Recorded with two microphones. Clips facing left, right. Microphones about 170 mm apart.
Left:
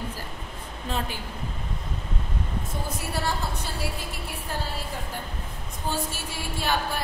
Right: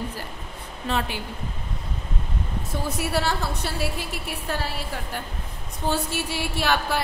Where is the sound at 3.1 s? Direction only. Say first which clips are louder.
Right 3 dB; 75° right (ahead or behind).